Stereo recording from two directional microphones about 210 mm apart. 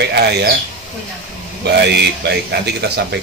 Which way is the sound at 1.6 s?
50° right (ahead or behind).